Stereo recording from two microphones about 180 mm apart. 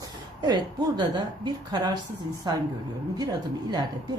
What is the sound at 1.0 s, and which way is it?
Speech, 25° right (ahead or behind).